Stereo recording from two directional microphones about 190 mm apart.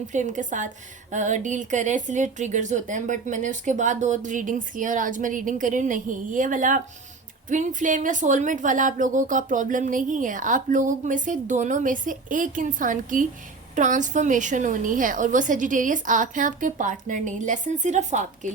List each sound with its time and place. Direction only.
0.1 s speech: 40° right (ahead or behind)